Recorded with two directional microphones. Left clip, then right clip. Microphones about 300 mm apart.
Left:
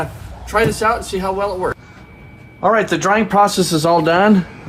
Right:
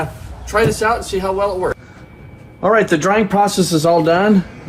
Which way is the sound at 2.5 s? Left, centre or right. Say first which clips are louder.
Right 1 dB; left.